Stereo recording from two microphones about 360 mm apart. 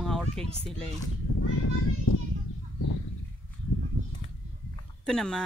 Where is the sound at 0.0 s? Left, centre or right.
Centre.